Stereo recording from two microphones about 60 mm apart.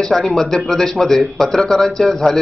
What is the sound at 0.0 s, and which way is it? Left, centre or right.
Speech, centre.